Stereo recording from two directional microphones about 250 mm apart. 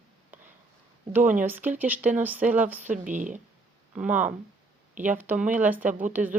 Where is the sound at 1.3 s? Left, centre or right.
Centre.